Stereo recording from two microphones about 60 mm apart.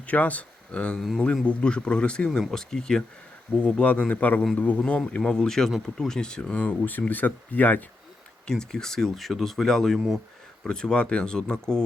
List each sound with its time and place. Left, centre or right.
0.0 s speech: left; by 3.0 s centre
3.6 s speech: left
8.4 s speech: centre